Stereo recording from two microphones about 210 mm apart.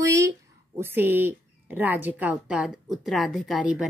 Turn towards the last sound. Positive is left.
turn(degrees=-5)  # may be behind; listen again after turning